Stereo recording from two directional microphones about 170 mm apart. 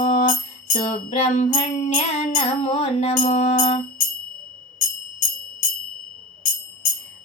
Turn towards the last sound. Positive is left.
turn(degrees=55)  # may be behind; listen again after turning